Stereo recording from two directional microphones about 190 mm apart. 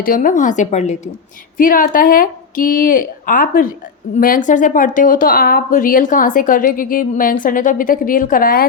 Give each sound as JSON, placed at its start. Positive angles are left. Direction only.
{"t": 0.0, "sound": "a woman's voice", "side_deg": 45}